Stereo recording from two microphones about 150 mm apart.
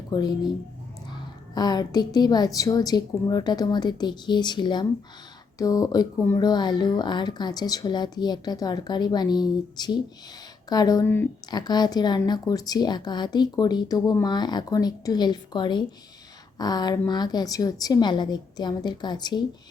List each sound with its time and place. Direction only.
0.1 s speech: 30° left (ahead or behind)
11.5 s speech: 25° left (ahead or behind)